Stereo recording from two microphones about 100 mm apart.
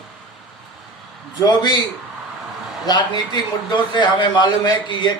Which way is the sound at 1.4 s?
45° left (ahead or behind).